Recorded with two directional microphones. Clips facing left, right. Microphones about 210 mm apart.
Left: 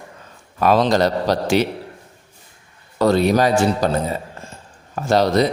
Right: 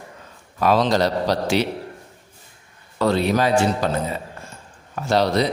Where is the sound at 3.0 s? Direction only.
45° left (ahead or behind).